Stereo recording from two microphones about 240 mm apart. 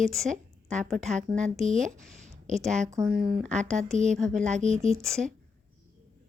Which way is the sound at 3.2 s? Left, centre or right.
Centre.